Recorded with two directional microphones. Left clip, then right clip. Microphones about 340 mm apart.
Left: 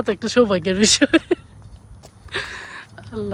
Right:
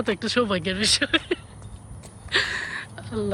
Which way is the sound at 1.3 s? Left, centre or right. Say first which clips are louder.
Left 6 dB; centre.